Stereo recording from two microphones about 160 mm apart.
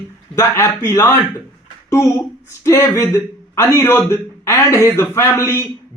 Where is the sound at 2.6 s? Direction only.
20° left (ahead or behind).